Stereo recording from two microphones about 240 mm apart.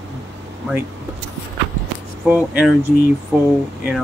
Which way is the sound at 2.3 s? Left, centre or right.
Centre.